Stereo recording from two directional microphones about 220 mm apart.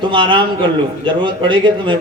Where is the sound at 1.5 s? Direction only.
20° right (ahead or behind).